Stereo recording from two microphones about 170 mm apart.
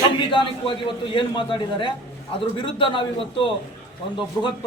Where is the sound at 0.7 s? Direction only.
30° left (ahead or behind).